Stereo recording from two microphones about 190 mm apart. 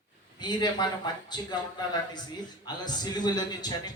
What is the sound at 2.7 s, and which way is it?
Speech, 20° left (ahead or behind).